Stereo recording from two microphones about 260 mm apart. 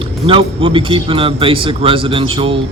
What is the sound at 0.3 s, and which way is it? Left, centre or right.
Speech, right.